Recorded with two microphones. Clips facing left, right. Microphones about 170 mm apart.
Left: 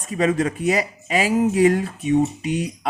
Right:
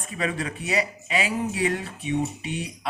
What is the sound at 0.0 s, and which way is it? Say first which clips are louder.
Speech: left 9 dB; 40° left (ahead or behind).